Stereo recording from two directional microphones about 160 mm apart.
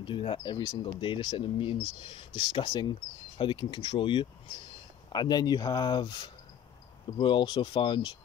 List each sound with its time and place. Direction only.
0.0 s speech: 30° left (ahead or behind)